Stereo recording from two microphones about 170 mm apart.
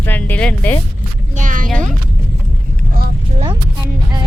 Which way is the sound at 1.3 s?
50° right (ahead or behind).